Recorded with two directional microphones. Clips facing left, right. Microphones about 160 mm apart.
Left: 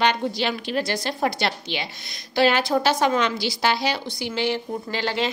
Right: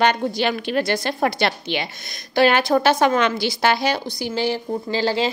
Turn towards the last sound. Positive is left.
turn(degrees=-30)  # may be behind; listen again after turning